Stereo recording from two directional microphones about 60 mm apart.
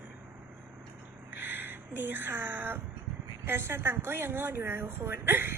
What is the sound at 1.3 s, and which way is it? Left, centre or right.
A woman's voice, right.